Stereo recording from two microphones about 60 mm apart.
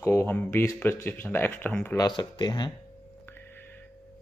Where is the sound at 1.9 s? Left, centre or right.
Left.